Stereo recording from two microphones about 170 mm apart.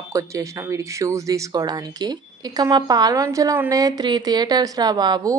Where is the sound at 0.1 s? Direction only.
20° right (ahead or behind).